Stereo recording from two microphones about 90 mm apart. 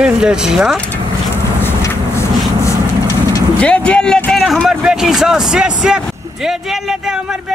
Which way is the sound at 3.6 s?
15° left (ahead or behind).